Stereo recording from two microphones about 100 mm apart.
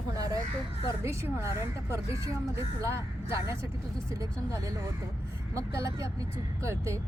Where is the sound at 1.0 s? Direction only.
25° right (ahead or behind).